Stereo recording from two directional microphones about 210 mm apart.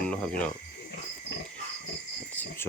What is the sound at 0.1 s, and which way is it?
Speech, 5° left (ahead or behind).